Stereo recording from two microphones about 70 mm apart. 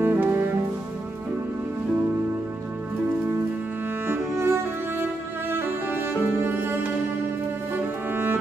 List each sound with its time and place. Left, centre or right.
0.0 s music: right
4.1 s music: right
7.7 s music: right